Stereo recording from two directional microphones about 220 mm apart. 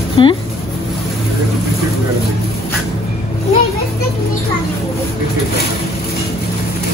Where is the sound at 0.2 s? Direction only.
25° left (ahead or behind).